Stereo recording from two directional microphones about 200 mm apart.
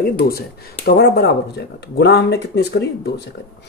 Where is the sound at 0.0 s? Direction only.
50° left (ahead or behind).